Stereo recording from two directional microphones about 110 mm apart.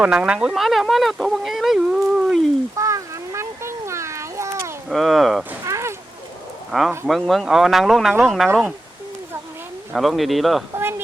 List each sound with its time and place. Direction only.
0.0 s speech: 10° right (ahead or behind)
2.7 s cat: 30° right (ahead or behind)
4.9 s speech: centre (ahead or behind)
5.6 s a sound: 25° right (ahead or behind)
6.7 s speech: centre (ahead or behind)
9.9 s speech: centre (ahead or behind)
10.8 s a sound: 20° right (ahead or behind)